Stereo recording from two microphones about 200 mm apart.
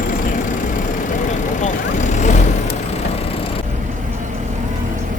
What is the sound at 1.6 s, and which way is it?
Vehicle, 35° left (ahead or behind).